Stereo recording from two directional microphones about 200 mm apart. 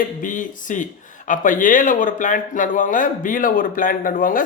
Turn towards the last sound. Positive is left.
turn(degrees=45)  # may be behind; listen again after turning